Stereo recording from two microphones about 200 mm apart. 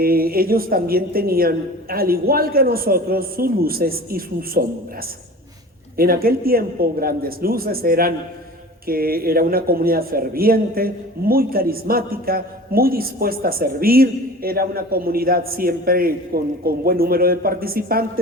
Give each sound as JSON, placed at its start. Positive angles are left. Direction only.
{"t": 0.0, "sound": "a man's voice", "side_deg": -50}
{"t": 6.0, "sound": "a man's voice", "side_deg": -50}